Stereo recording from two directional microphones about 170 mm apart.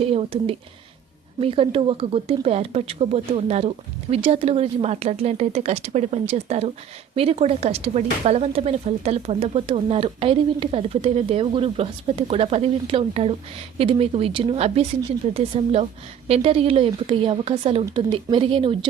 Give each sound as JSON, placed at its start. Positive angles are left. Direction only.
{"t": 0.0, "sound": "speech", "side_deg": -35}